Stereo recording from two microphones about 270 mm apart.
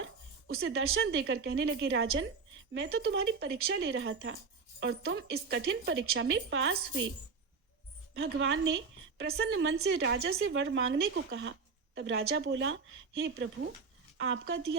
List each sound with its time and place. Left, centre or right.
0.0 s a woman's voice: right
8.1 s a woman's voice: right